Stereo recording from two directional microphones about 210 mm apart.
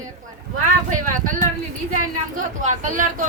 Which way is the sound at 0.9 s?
40° right (ahead or behind).